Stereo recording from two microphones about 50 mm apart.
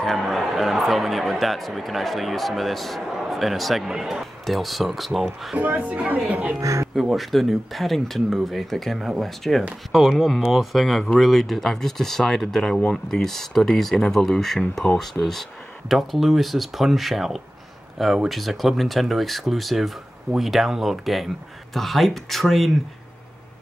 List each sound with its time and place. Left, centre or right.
0.0 s speech: centre
5.6 s a woman's voice: right
6.6 s speech: right
7.2 s speech: centre